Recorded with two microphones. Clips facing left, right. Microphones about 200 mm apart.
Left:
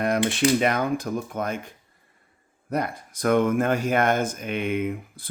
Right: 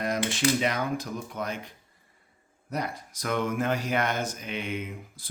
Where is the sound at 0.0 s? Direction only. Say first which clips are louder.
Left 5 dB; 60° left (ahead or behind).